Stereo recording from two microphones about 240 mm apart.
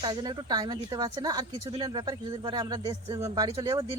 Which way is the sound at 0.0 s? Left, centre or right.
Centre.